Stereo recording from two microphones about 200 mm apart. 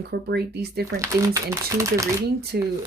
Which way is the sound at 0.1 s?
55° right (ahead or behind).